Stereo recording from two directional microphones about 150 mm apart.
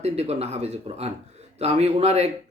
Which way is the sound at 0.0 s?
45° right (ahead or behind).